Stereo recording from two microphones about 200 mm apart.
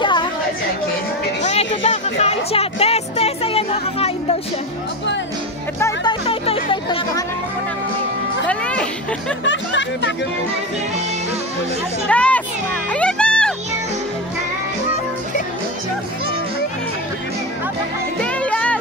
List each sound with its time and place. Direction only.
0.0 s chatter: 25° left (ahead or behind)
1.4 s music: 30° left (ahead or behind)
5.8 s speech: 15° left (ahead or behind)
6.2 s speech: 30° left (ahead or behind)
8.5 s music: 5° left (ahead or behind)
9.4 s music: 65° left (ahead or behind)
12.1 s a sound: 5° left (ahead or behind)
12.9 s music: 5° left (ahead or behind)
18.2 s music: 5° left (ahead or behind)